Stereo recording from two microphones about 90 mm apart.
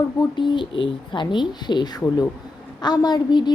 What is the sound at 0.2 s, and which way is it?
A woman's voice, 60° left (ahead or behind).